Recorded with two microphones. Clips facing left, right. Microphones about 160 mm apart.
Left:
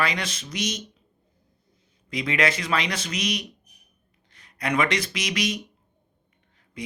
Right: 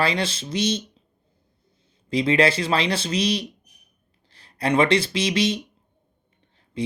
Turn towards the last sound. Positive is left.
turn(degrees=-30)  # may be behind; listen again after turning